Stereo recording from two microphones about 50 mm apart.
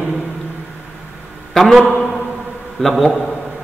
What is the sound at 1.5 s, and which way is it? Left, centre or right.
A man's voice, centre.